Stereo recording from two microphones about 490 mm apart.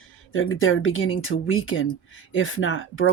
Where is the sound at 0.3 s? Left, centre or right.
Left.